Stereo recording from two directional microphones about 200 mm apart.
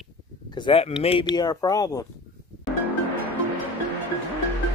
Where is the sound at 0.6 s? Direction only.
25° left (ahead or behind).